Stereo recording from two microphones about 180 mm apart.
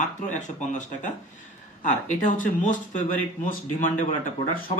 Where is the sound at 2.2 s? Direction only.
45° left (ahead or behind).